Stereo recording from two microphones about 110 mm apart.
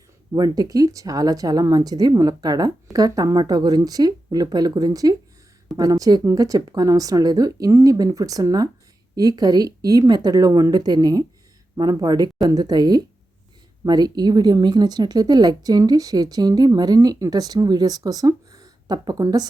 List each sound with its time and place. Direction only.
0.3 s a woman's voice: 35° right (ahead or behind)